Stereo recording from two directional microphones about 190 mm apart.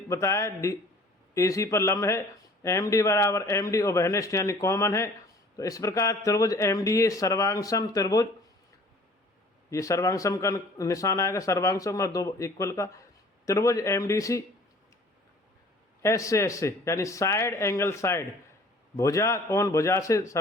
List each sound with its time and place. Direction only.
0.1 s speech: 15° left (ahead or behind)
9.6 s speech: 15° left (ahead or behind)
16.0 s speech: 15° left (ahead or behind)